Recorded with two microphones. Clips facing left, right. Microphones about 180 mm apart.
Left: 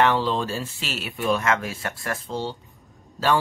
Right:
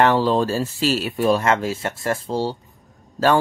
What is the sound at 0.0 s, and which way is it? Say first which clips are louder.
Speech: right 4 dB; 40° right (ahead or behind).